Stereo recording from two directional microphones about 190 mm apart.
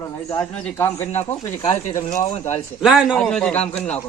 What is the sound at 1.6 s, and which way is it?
Speech, 35° left (ahead or behind).